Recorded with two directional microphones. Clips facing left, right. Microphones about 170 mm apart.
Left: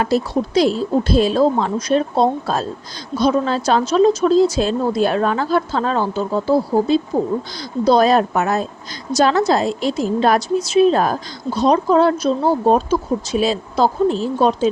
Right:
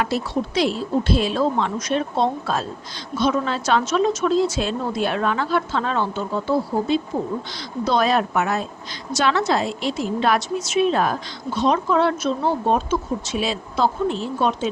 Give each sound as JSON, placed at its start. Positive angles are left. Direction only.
{"t": 0.0, "sound": "a woman's voice", "side_deg": 40}